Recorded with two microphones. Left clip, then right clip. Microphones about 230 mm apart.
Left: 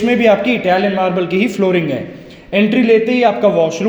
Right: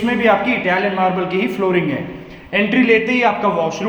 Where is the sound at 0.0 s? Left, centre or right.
Left.